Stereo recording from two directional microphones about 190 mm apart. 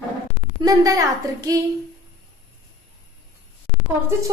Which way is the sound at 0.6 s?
20° right (ahead or behind).